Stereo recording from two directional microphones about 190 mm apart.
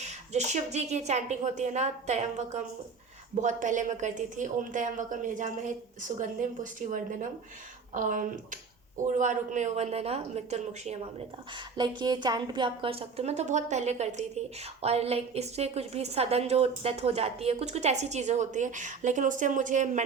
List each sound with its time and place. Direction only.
0.0 s a woman's voice: 35° right (ahead or behind)
11.5 s a woman's voice: 25° right (ahead or behind); by 20.0 s 40° right (ahead or behind)